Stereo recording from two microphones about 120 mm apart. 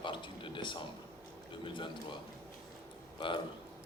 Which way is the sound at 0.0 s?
45° left (ahead or behind).